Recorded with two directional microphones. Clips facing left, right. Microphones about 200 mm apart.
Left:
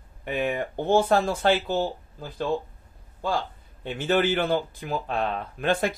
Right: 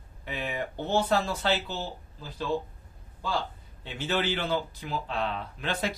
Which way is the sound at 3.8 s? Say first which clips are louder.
Left 6 dB; 50° left (ahead or behind).